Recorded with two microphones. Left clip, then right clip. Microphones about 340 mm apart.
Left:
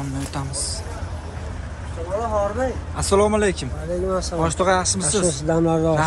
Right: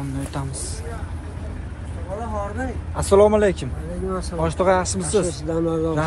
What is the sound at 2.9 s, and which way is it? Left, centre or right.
Speech, centre.